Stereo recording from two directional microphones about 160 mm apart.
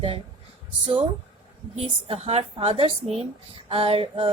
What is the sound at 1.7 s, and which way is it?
A woman's voice, 35° right (ahead or behind).